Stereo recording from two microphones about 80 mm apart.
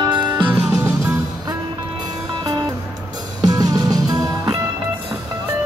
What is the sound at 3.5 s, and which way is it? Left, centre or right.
Music, right.